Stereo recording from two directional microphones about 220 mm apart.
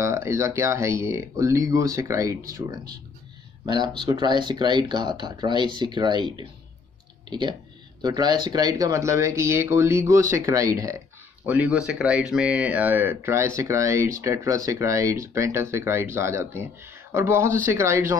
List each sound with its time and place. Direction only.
0.0 s speech: 10° right (ahead or behind)